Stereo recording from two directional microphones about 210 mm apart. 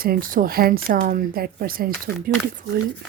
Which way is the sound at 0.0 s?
45° right (ahead or behind).